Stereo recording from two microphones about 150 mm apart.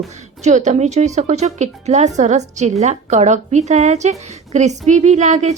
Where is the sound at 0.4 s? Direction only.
50° right (ahead or behind).